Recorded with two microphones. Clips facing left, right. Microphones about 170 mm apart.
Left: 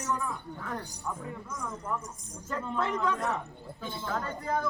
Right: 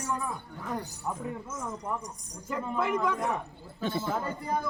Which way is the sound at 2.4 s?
10° right (ahead or behind).